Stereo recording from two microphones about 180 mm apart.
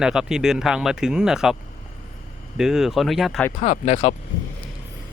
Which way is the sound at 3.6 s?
40° left (ahead or behind).